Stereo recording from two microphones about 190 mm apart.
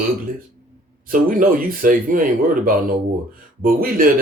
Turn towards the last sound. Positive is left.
turn(degrees=-50)  # may be behind; listen again after turning